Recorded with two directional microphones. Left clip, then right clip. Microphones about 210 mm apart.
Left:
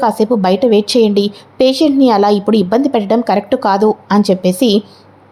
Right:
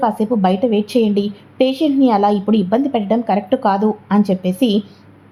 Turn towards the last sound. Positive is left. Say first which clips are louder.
# left 6 dB
turn(degrees=15)  # may be behind; listen again after turning